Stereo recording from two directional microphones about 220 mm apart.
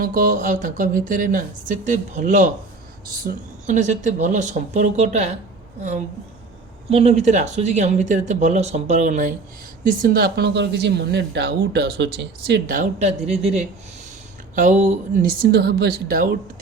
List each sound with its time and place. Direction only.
0.0 s a woman's voice: 40° right (ahead or behind)
6.9 s a woman's voice: 30° right (ahead or behind)
13.1 s speech: centre (ahead or behind)
14.5 s a woman's voice: 35° right (ahead or behind)